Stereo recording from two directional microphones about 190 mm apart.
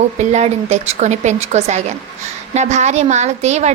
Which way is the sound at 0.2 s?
35° right (ahead or behind).